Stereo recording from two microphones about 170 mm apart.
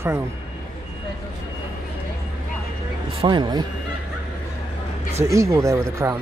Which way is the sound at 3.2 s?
25° right (ahead or behind).